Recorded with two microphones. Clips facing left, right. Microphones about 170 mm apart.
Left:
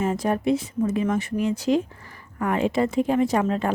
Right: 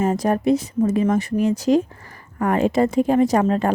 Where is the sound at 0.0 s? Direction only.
40° right (ahead or behind).